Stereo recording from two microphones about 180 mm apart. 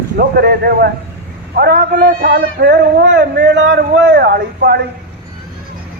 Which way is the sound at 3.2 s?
75° right (ahead or behind).